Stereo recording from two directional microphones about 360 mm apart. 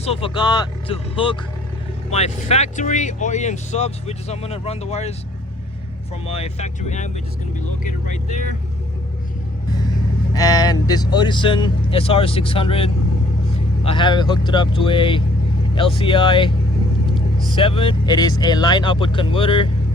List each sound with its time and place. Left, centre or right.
0.0 s speech: centre
6.2 s speech: centre
10.3 s speech: centre